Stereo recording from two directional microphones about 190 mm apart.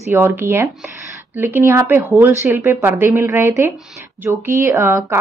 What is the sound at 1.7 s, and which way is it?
A woman's voice, 15° right (ahead or behind).